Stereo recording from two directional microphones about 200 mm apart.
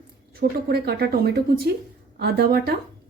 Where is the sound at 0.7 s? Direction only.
55° right (ahead or behind).